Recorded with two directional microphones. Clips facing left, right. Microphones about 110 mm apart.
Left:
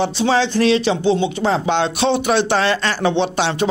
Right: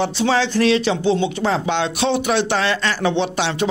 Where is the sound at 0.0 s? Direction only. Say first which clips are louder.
Left 1 dB; 25° left (ahead or behind).